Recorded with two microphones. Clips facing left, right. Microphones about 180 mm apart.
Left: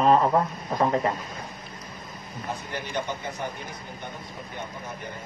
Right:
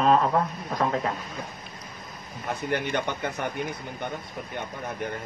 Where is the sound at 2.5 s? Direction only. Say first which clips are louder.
Right 5 dB; 60° right (ahead or behind).